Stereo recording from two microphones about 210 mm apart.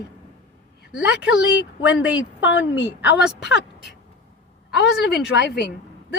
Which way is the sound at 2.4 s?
60° left (ahead or behind).